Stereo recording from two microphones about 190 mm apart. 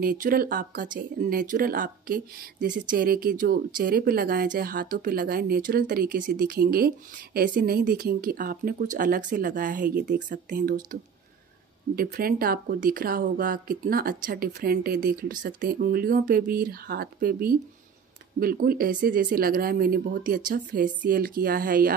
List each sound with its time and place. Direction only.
0.0 s speech: 45° right (ahead or behind)